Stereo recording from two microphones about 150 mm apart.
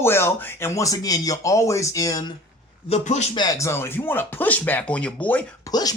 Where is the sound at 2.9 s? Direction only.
50° left (ahead or behind).